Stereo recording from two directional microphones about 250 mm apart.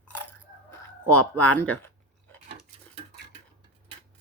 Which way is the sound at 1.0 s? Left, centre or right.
Left.